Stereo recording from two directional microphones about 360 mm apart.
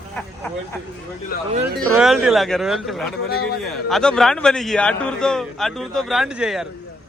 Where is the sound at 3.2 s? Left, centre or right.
Left.